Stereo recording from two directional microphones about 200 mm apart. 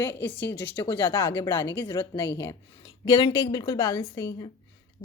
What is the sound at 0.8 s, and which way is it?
Speech, 25° left (ahead or behind).